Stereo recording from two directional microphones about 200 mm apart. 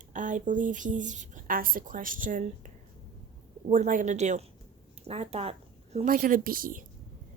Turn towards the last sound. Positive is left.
turn(degrees=-45)  # may be behind; listen again after turning